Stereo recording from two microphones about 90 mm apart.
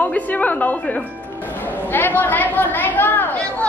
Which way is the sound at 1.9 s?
20° left (ahead or behind).